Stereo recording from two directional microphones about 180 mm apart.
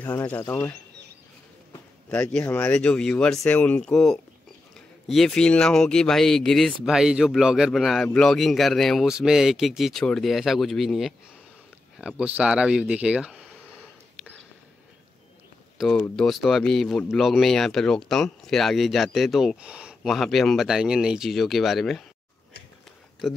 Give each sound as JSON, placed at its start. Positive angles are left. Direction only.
{"t": 0.0, "sound": "speech", "side_deg": 10}
{"t": 2.0, "sound": "speech", "side_deg": 5}
{"t": 16.0, "sound": "speech", "side_deg": 0}
{"t": 23.2, "sound": "speech", "side_deg": 0}